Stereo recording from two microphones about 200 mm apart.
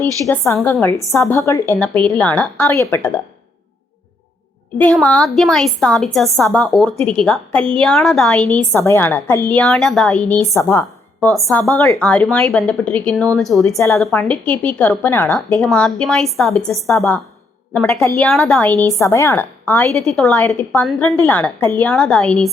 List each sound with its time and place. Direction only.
0.5 s a woman's voice: 10° left (ahead or behind)
4.8 s a woman's voice: 5° left (ahead or behind)
11.3 s a woman's voice: centre (ahead or behind)
17.9 s a woman's voice: 15° left (ahead or behind)
18.3 s a woman's voice: 5° left (ahead or behind)
18.9 s a woman's voice: 15° left (ahead or behind)